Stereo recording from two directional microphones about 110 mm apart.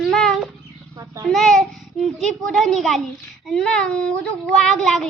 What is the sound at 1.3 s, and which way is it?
A child's voice, centre (ahead or behind).